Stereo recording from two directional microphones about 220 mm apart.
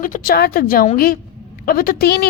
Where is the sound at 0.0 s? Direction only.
40° left (ahead or behind).